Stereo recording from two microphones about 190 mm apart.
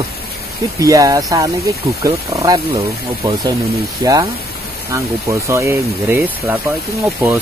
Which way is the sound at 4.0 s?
20° right (ahead or behind).